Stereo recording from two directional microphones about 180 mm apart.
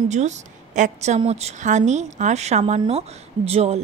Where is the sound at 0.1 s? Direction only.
40° right (ahead or behind).